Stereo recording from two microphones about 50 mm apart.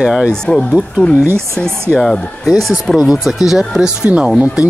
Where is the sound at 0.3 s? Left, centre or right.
Centre.